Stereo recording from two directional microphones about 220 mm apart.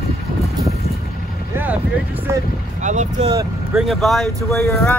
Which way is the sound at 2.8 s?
35° right (ahead or behind).